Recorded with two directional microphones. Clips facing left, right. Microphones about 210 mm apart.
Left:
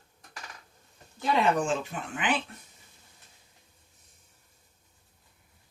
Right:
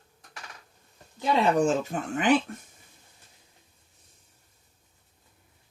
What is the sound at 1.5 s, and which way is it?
Speech, 40° right (ahead or behind).